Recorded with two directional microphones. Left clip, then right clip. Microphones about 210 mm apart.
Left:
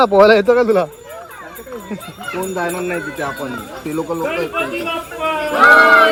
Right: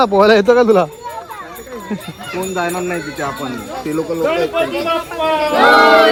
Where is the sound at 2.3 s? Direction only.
Centre (ahead or behind).